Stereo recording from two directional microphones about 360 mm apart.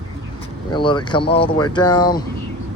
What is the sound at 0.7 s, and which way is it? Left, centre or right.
Speech, centre.